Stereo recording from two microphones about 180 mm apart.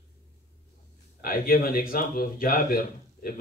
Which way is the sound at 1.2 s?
55° left (ahead or behind).